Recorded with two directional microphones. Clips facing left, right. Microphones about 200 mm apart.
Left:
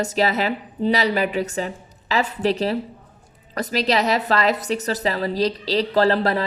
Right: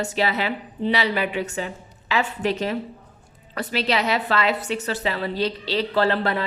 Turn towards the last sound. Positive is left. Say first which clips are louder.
# left 3 dB
turn(degrees=35)  # may be behind; listen again after turning